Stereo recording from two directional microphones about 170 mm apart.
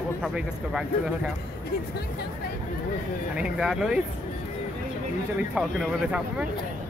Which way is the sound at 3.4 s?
5° right (ahead or behind).